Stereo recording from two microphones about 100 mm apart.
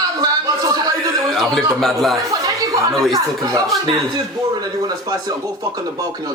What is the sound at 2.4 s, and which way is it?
Chatter, 35° right (ahead or behind).